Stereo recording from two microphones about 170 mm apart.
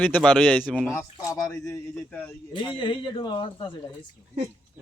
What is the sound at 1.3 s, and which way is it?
Speech, 20° left (ahead or behind).